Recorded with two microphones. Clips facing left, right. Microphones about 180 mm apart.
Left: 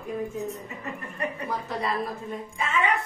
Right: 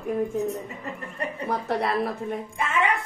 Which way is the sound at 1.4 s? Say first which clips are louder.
Right 7 dB; 65° right (ahead or behind).